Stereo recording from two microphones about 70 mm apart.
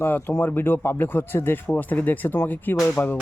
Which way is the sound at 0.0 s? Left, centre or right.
Left.